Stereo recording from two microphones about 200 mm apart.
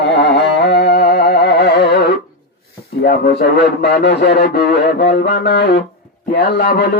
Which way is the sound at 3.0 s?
50° left (ahead or behind).